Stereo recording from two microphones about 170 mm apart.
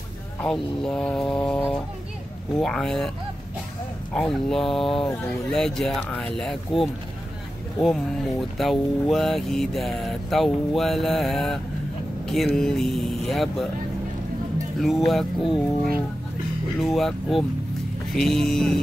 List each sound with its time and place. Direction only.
0.4 s speech: 5° left (ahead or behind)
4.1 s speech: 5° left (ahead or behind)
14.8 s speech: centre (ahead or behind)